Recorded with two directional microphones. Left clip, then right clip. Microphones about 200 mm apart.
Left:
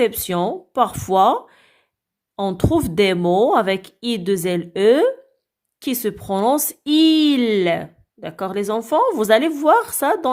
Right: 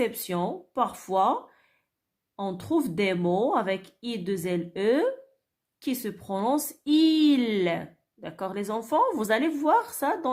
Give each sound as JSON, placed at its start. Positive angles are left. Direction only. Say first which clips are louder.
{"t": 0.0, "sound": "speech", "louder": "left 9 dB", "side_deg": 40}